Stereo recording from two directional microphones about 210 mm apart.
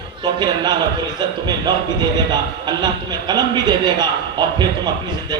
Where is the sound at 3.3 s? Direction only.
20° right (ahead or behind).